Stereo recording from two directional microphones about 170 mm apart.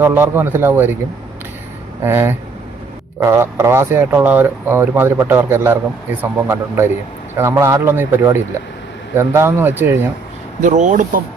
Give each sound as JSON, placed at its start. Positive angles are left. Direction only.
{"t": 0.0, "sound": "speech", "side_deg": -15}
{"t": 2.0, "sound": "speech", "side_deg": -15}
{"t": 10.6, "sound": "speech", "side_deg": -45}